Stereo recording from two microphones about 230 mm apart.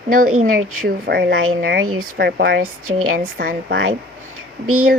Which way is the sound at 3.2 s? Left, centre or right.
Right.